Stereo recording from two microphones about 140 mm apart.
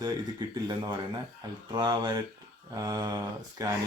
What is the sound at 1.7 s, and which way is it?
Speech, 30° right (ahead or behind).